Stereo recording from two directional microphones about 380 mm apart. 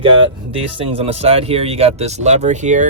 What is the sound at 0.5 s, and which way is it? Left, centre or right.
Speech, centre.